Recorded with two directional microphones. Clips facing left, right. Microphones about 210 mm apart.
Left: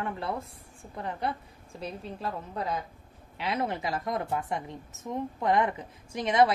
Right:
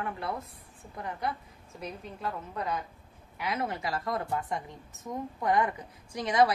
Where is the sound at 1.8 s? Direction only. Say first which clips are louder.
Left 2 dB; 30° left (ahead or behind).